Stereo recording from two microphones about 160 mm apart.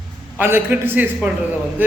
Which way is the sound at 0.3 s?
10° right (ahead or behind).